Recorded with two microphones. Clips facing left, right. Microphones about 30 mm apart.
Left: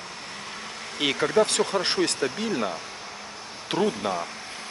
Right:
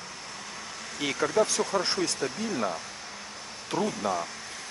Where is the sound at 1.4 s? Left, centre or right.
Left.